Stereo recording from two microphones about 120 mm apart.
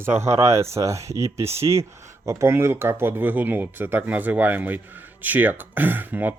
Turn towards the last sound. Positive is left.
turn(degrees=-15)  # may be behind; listen again after turning